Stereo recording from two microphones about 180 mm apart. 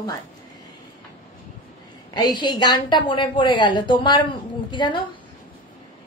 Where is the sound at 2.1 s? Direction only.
25° left (ahead or behind).